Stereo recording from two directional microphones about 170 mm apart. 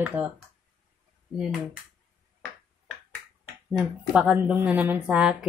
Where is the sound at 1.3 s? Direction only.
5° right (ahead or behind).